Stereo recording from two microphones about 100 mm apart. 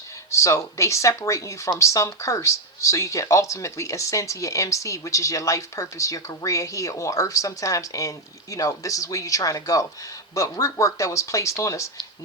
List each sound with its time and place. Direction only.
0.3 s speech: 30° left (ahead or behind)